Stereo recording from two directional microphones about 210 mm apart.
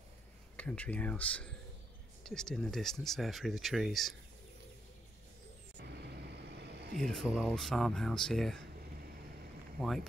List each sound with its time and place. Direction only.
0.6 s speech: 5° left (ahead or behind)
6.3 s vehicle: 50° right (ahead or behind)
7.0 s speech: centre (ahead or behind)
9.8 s speech: centre (ahead or behind)